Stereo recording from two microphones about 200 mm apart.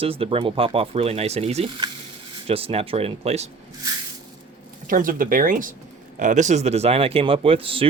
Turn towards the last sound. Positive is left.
turn(degrees=-30)  # may be behind; listen again after turning